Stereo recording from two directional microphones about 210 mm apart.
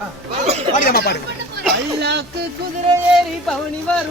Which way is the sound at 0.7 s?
45° left (ahead or behind).